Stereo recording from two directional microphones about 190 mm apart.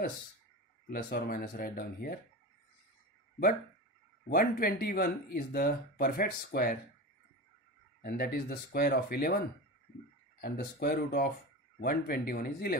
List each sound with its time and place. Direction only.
0.8 s speech: 50° left (ahead or behind)
4.3 s speech: 50° left (ahead or behind)
8.0 s speech: 55° left (ahead or behind)
10.4 s speech: 50° left (ahead or behind)